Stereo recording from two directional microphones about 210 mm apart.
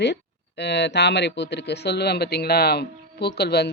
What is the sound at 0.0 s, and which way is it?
Speech, 55° left (ahead or behind).